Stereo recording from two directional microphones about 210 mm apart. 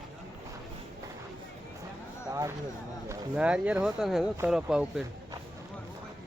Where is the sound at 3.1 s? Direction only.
5° right (ahead or behind).